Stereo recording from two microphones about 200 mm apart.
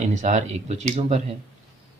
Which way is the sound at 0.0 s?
35° right (ahead or behind).